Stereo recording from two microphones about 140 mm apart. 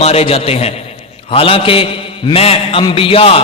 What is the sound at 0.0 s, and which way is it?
A man's voice, 45° left (ahead or behind).